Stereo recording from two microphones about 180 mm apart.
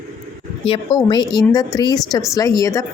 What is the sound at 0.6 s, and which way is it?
Speech, 30° left (ahead or behind).